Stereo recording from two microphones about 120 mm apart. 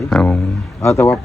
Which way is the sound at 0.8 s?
20° left (ahead or behind).